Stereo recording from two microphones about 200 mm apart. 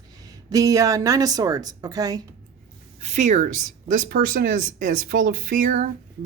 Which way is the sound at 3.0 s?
35° right (ahead or behind).